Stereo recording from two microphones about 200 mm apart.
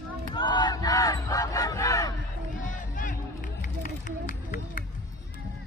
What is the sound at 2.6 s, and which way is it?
Music, 40° left (ahead or behind).